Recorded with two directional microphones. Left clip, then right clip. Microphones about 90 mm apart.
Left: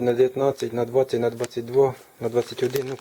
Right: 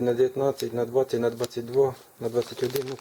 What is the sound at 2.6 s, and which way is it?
Speech, centre (ahead or behind).